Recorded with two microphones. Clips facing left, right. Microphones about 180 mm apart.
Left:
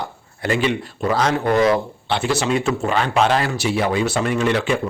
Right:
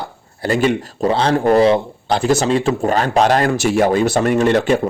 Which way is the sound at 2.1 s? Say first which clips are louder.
Right 5 dB; 40° right (ahead or behind).